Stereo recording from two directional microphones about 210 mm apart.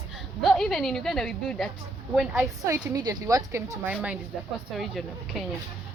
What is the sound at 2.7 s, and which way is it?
Speech, 20° right (ahead or behind).